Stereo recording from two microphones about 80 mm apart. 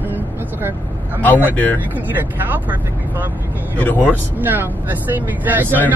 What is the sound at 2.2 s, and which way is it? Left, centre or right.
Speech, right.